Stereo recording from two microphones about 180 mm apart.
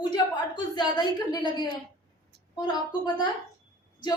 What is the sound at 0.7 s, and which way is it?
Speech, 25° left (ahead or behind).